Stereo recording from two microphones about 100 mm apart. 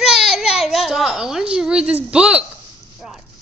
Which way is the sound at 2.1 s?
10° right (ahead or behind).